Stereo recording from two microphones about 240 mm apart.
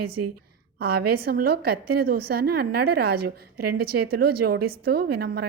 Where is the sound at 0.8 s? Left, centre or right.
Right.